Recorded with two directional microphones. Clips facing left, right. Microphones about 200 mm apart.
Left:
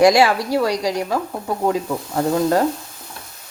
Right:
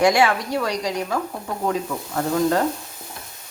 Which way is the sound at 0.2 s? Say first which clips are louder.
Left 4 dB; 35° left (ahead or behind).